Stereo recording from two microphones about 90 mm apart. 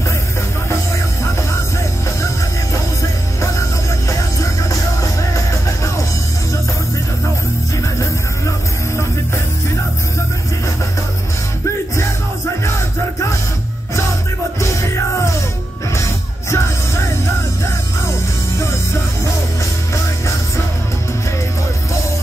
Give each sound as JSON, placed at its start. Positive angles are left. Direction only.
{"t": 3.0, "sound": "music", "side_deg": 35}
{"t": 14.6, "sound": "music", "side_deg": 35}
{"t": 16.4, "sound": "music", "side_deg": 30}